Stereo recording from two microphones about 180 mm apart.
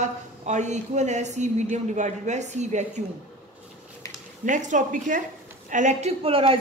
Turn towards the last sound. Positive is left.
turn(degrees=-30)  # may be behind; listen again after turning